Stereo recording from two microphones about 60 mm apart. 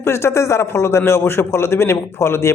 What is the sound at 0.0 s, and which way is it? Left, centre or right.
A man's voice, left.